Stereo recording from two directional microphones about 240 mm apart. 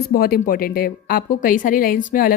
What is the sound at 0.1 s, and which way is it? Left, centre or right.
A woman's voice, left.